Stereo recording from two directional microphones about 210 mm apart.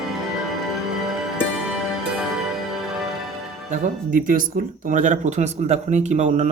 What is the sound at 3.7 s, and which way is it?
Speech, 40° right (ahead or behind).